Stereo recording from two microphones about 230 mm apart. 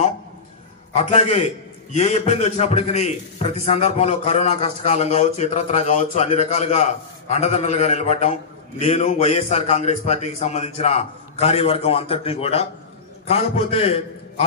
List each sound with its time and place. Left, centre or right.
0.9 s a man's voice: left